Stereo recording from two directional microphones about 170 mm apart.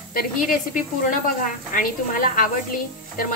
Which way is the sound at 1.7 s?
55° left (ahead or behind).